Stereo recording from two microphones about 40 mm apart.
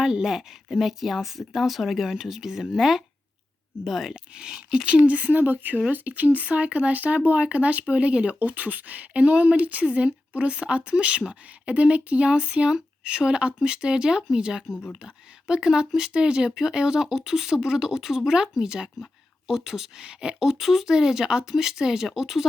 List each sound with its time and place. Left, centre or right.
0.0 s speech: centre
4.1 s speech: right
4.9 s speech: right; by 22.4 s centre